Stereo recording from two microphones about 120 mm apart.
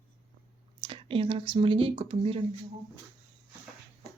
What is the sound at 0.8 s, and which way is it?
Speech, 50° right (ahead or behind).